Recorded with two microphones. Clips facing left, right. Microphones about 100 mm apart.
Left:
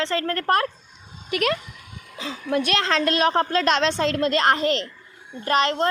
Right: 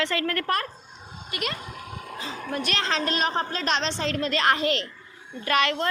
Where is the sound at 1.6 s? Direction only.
45° right (ahead or behind).